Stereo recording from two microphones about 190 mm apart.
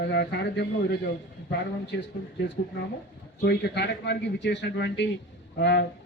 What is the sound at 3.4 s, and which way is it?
A man's voice, 60° left (ahead or behind).